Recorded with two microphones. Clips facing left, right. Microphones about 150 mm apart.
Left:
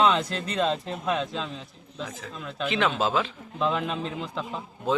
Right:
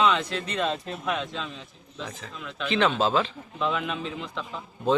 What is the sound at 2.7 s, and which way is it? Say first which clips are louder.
Speech: right 2 dB; 5° left (ahead or behind).